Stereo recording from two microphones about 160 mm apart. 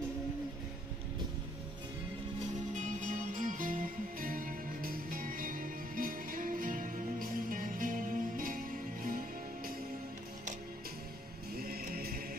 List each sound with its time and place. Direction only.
2.7 s music: 50° right (ahead or behind)
11.5 s music: 70° right (ahead or behind)